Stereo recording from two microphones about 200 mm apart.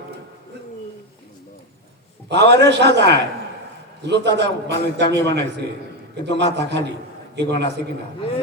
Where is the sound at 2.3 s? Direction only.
60° right (ahead or behind).